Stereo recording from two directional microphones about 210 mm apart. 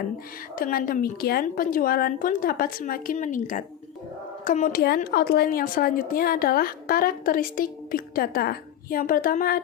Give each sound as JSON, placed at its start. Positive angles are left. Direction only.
{"t": 0.5, "sound": "a woman's voice", "side_deg": 40}